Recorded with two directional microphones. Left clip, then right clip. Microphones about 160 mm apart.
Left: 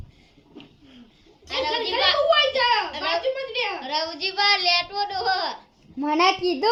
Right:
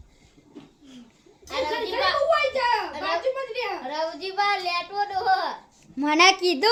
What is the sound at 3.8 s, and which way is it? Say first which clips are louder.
A child's voice: left 2 dB; 30° right (ahead or behind).